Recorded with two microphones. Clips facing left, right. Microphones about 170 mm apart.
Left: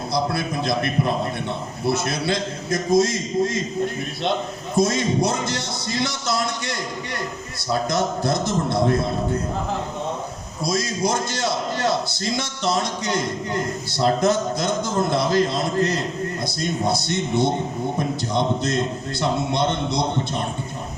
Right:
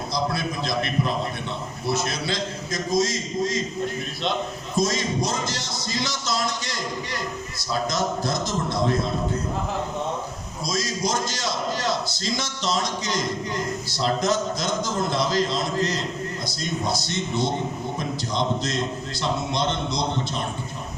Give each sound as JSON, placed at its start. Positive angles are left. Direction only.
{"t": 0.3, "sound": "a man's voice", "side_deg": 60}
{"t": 1.8, "sound": "a man's voice", "side_deg": 60}
{"t": 4.8, "sound": "a man's voice", "side_deg": 60}
{"t": 7.9, "sound": "a man's voice", "side_deg": 60}
{"t": 10.7, "sound": "a man's voice", "side_deg": 60}